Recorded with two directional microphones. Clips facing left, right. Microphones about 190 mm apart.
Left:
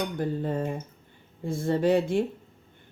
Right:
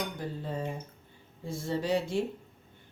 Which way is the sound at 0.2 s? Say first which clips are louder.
Left 7 dB; 55° left (ahead or behind).